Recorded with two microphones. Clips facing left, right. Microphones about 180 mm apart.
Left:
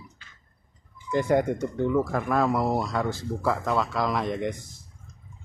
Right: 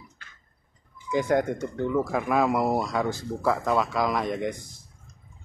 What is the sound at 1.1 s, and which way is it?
Speech, 5° left (ahead or behind).